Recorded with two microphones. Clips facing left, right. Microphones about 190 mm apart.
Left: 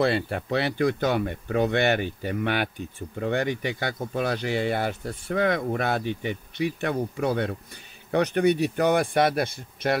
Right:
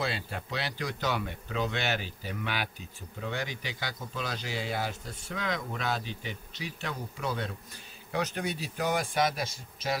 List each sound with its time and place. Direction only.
0.0 s speech: 60° left (ahead or behind)